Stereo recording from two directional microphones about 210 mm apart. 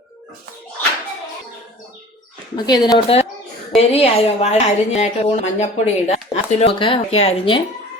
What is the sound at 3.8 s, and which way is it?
A woman's voice, 30° left (ahead or behind).